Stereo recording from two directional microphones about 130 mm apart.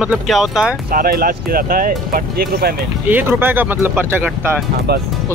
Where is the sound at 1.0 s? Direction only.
90° right.